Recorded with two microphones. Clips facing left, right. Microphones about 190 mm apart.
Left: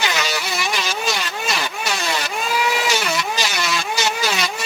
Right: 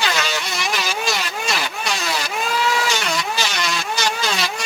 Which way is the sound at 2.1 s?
5° right (ahead or behind).